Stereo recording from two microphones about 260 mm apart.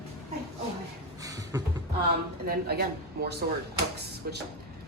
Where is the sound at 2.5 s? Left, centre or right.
Right.